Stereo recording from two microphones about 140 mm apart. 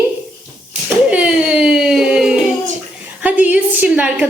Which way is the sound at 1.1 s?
5° right (ahead or behind).